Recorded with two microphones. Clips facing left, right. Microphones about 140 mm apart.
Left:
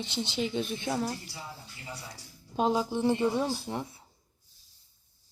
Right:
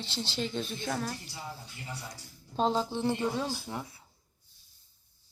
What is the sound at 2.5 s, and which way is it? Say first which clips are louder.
Speech: left 1 dB; 10° left (ahead or behind).